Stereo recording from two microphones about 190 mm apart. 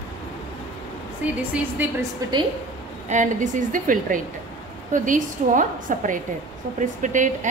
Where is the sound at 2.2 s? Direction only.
20° right (ahead or behind).